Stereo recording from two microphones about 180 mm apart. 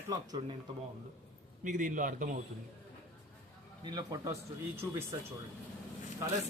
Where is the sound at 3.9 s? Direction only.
20° right (ahead or behind).